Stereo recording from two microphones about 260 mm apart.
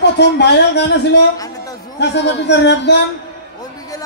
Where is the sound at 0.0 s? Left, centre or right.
Left.